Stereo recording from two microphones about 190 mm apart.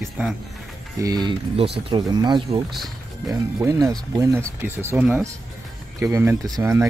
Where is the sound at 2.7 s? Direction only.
Centre (ahead or behind).